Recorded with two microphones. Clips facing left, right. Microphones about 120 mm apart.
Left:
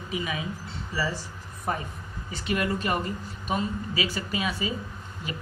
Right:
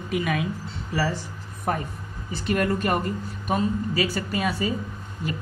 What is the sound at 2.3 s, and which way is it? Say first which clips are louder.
Speech: right 4 dB; 40° right (ahead or behind).